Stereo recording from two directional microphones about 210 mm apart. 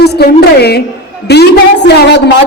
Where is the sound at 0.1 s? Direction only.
50° left (ahead or behind).